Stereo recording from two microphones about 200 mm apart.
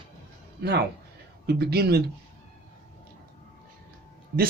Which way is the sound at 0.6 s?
55° right (ahead or behind).